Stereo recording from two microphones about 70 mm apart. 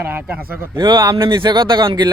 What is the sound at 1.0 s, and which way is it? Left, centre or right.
Speech, right.